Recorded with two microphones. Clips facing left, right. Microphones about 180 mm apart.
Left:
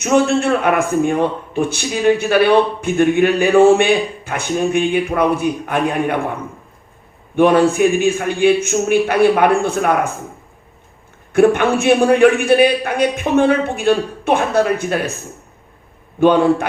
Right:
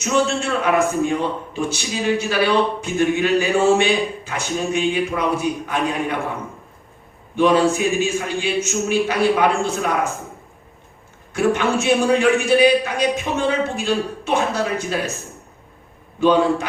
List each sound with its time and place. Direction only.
0.0 s a man's voice: 55° left (ahead or behind)
7.3 s a man's voice: 55° left (ahead or behind)
11.3 s a man's voice: 55° left (ahead or behind)
16.2 s a man's voice: 55° left (ahead or behind)